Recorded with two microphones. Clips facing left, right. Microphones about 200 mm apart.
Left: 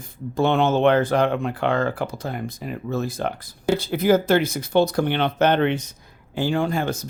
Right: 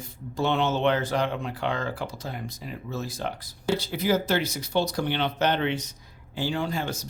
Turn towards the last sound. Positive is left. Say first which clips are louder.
# left 6 dB
turn(degrees=55)  # may be behind; listen again after turning